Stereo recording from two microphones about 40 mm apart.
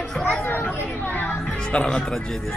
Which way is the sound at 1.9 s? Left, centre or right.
Left.